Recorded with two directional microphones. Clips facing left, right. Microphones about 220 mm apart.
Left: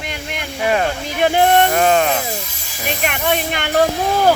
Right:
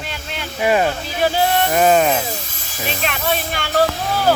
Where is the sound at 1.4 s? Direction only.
55° left (ahead or behind).